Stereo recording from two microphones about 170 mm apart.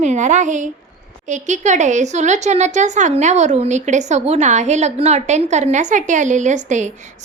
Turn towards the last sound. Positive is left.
turn(degrees=-45)  # may be behind; listen again after turning